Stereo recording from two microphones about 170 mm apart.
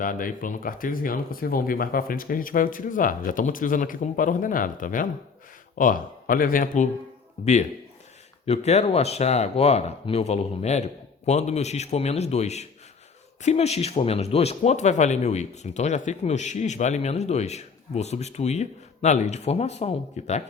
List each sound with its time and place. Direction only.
0.0 s speech: 55° left (ahead or behind)
7.4 s speech: 35° left (ahead or behind)